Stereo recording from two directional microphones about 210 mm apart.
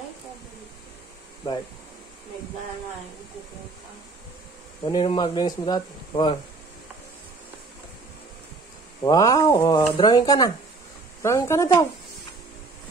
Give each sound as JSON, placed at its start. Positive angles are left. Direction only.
{"t": 4.8, "sound": "speech", "side_deg": 20}
{"t": 9.0, "sound": "speech", "side_deg": 20}